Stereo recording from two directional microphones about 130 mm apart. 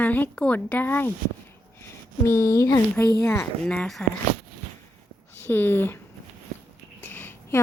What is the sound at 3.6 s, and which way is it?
Speech, 5° left (ahead or behind).